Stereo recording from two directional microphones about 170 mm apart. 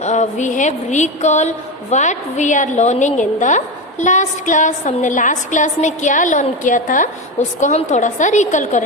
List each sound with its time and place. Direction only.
0.0 s a woman's voice: 45° left (ahead or behind)